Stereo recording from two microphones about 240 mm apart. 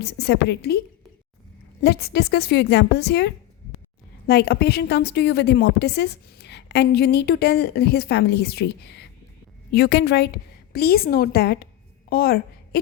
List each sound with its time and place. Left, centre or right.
0.0 s a woman's voice: left
1.8 s a woman's voice: left